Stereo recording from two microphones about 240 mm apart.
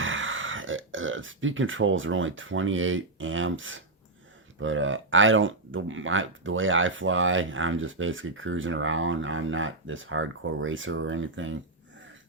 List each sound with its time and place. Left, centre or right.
0.0 s speech: right